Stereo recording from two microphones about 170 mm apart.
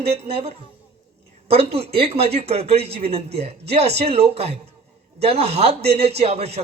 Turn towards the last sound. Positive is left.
turn(degrees=-35)  # may be behind; listen again after turning